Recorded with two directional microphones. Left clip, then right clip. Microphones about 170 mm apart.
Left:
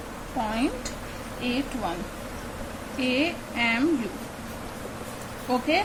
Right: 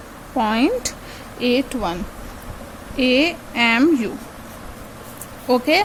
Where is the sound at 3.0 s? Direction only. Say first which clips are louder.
Right 9 dB; 80° right.